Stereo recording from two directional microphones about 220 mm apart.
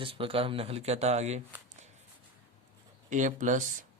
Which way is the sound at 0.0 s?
25° right (ahead or behind).